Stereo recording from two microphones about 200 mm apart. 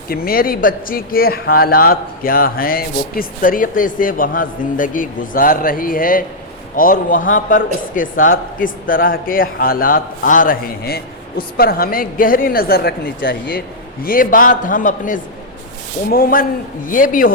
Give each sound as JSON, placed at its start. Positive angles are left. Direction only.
{"t": 0.1, "sound": "a man's voice", "side_deg": 45}